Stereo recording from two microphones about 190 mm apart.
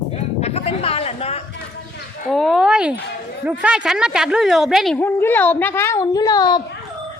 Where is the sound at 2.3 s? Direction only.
Centre (ahead or behind).